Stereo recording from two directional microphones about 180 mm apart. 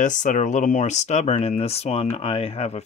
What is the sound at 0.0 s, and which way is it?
Speech, 45° left (ahead or behind).